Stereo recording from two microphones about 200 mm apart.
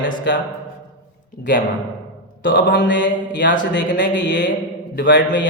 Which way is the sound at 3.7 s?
65° left (ahead or behind).